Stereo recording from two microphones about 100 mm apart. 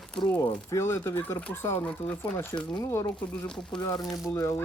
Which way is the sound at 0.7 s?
25° left (ahead or behind).